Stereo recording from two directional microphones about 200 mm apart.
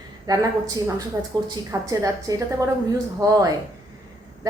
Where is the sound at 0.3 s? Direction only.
20° right (ahead or behind).